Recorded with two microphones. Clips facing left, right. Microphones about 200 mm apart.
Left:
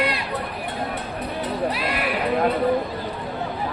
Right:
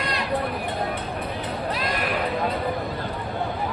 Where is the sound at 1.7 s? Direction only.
10° left (ahead or behind).